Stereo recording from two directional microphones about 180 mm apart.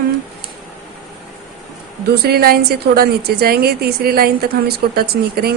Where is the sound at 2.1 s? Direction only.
60° right (ahead or behind).